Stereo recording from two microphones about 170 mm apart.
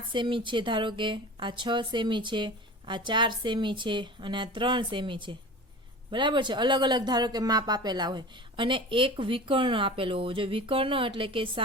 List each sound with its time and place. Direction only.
0.1 s speech: 30° right (ahead or behind)